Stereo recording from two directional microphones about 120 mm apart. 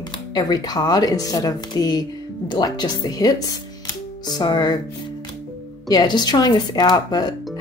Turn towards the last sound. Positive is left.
turn(degrees=35)  # may be behind; listen again after turning